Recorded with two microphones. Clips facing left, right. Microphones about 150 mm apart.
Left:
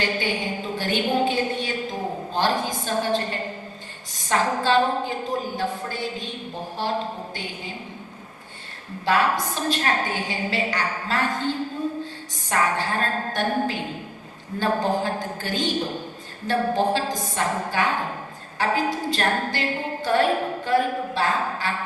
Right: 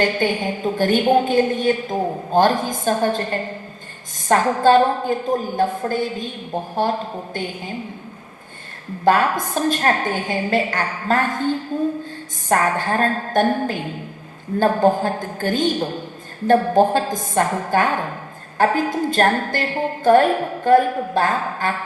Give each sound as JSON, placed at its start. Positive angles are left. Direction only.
{"t": 0.0, "sound": "a woman's voice", "side_deg": -50}
{"t": 9.0, "sound": "a woman's voice", "side_deg": -50}